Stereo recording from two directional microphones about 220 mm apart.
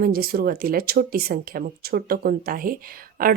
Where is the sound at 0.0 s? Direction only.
45° right (ahead or behind).